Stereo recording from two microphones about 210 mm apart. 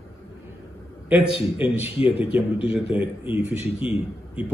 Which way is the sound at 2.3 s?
5° right (ahead or behind).